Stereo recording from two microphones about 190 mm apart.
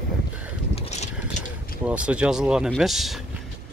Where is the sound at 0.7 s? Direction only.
35° left (ahead or behind).